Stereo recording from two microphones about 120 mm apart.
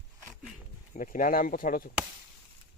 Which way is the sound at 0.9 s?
90° left.